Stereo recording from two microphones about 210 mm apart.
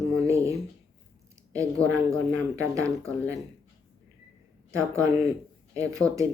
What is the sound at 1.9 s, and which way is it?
Speech, 15° right (ahead or behind).